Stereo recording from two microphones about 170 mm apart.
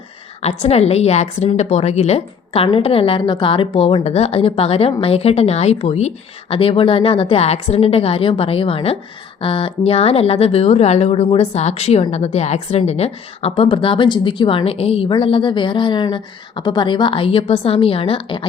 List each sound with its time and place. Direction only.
0.4 s speech: 40° left (ahead or behind)